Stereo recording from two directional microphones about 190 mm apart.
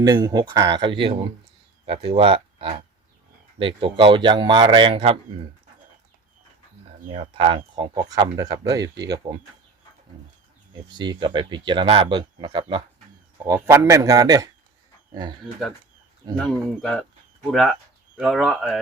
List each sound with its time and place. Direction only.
0.0 s a man's voice: 20° right (ahead or behind)
7.1 s a man's voice: 25° right (ahead or behind)
10.8 s a man's voice: 20° right (ahead or behind)
16.4 s speech: 5° left (ahead or behind)